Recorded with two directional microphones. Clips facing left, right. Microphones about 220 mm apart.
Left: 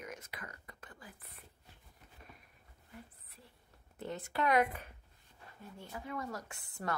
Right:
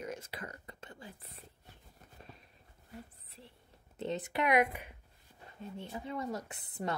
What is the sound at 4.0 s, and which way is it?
Speech, 20° right (ahead or behind).